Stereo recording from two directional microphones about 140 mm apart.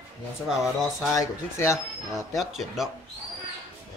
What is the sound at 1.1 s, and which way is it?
Speech, 20° left (ahead or behind).